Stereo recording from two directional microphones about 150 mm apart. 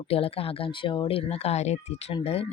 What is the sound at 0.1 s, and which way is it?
Speech, 40° left (ahead or behind).